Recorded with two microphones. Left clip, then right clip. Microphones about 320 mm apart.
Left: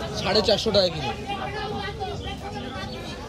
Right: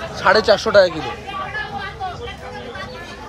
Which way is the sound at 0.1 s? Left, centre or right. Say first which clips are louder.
Right 8 dB; centre.